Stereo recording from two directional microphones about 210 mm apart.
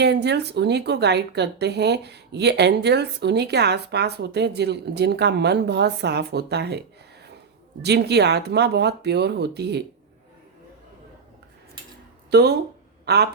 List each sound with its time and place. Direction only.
0.0 s speech: 55° right (ahead or behind)
12.3 s speech: 50° right (ahead or behind)